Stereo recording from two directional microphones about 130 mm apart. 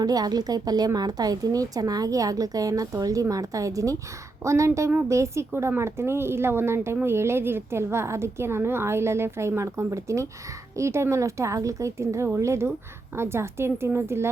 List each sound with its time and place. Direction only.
0.0 s speech: 30° right (ahead or behind)